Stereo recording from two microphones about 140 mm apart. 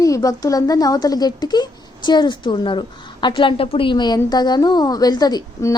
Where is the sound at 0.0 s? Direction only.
25° left (ahead or behind).